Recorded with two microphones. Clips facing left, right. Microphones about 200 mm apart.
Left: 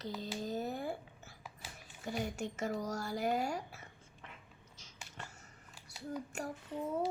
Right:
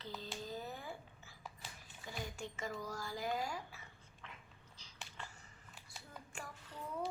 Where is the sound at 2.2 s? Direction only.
70° left (ahead or behind).